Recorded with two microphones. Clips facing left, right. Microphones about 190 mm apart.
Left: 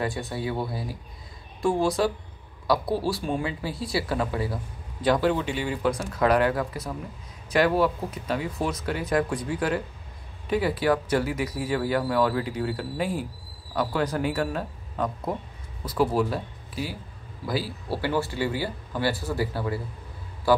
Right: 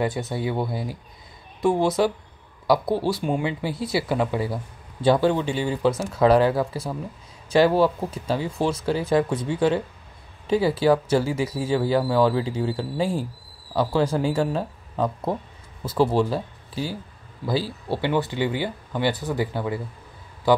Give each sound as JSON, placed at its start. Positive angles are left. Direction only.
{"t": 0.0, "sound": "speech", "side_deg": -20}
{"t": 3.2, "sound": "speech", "side_deg": -20}